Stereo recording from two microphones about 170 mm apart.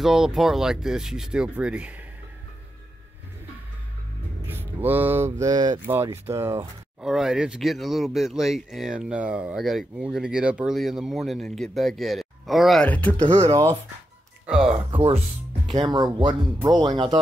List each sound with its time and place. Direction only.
0.0 s speech: centre (ahead or behind)
4.5 s speech: 10° right (ahead or behind)
7.0 s speech: centre (ahead or behind)
13.4 s speech: 20° right (ahead or behind)
14.9 s speech: 30° right (ahead or behind)